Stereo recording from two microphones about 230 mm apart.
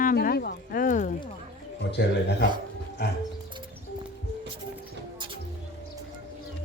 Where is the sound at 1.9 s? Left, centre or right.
Left.